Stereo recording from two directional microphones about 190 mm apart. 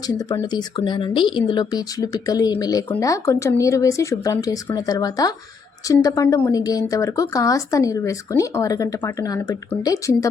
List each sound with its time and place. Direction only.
0.1 s a woman's voice: 20° left (ahead or behind)